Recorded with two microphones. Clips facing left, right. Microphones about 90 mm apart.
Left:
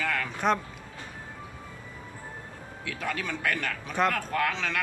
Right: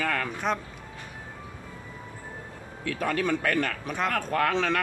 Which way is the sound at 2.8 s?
40° right (ahead or behind).